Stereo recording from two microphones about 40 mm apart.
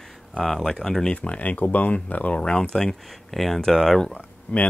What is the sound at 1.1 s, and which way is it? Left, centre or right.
Speech, left.